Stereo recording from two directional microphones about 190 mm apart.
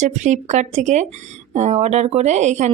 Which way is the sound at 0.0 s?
40° right (ahead or behind).